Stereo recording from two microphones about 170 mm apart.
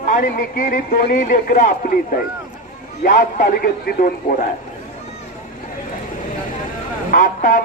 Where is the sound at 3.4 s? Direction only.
55° left (ahead or behind).